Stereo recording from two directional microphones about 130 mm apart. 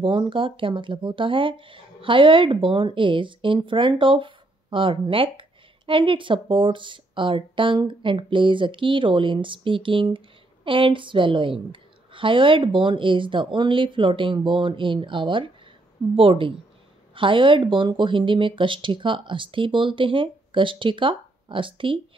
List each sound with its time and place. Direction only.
0.0 s a woman's voice: 40° right (ahead or behind)